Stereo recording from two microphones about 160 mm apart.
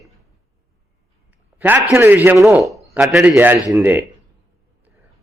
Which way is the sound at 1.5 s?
10° right (ahead or behind).